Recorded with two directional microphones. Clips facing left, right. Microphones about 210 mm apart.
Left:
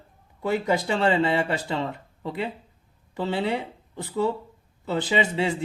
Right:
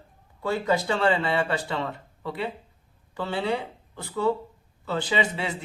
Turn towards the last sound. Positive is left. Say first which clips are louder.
# left 3 dB
turn(degrees=25)  # may be behind; listen again after turning